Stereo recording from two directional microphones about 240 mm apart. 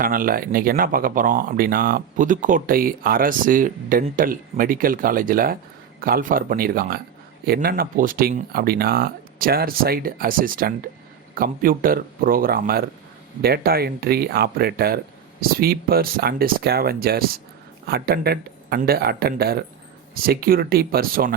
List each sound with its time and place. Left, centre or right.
0.0 s speech: right